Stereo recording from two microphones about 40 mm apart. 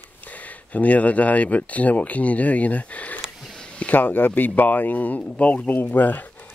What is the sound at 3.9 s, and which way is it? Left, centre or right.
Speech, left.